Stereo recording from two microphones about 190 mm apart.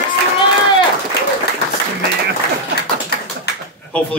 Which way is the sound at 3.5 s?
60° left (ahead or behind).